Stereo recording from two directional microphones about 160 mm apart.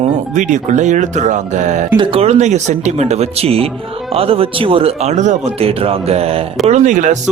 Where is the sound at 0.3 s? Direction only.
50° right (ahead or behind).